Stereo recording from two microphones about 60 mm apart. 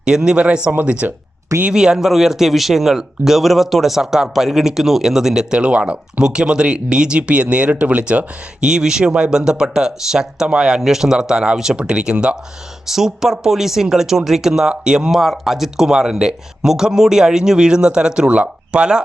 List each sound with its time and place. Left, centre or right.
0.0 s a man's voice: centre
0.7 s speech: right
1.6 s a man's voice: centre
8.6 s a man's voice: centre